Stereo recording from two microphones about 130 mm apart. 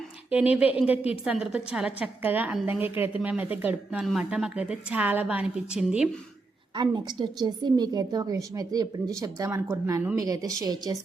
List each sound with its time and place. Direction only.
0.3 s a woman's voice: 10° right (ahead or behind)
6.7 s a woman's voice: 35° right (ahead or behind)